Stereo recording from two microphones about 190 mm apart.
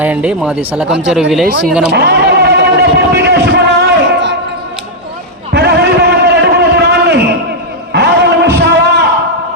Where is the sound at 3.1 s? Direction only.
60° right (ahead or behind).